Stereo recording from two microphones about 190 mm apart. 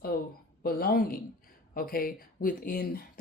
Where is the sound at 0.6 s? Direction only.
50° left (ahead or behind).